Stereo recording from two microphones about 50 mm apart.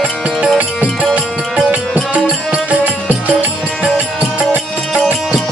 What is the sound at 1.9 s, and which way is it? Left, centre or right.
Music, right.